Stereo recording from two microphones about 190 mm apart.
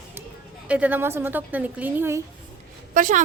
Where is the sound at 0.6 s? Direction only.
5° right (ahead or behind).